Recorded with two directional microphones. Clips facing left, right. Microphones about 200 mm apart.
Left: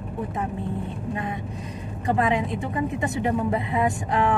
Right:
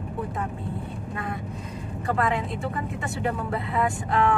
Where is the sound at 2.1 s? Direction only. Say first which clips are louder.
Left 3 dB; 15° left (ahead or behind).